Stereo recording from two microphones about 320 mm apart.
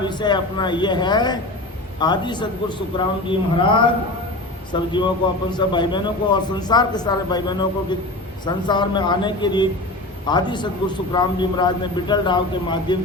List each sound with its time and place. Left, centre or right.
0.0 s a man's voice: centre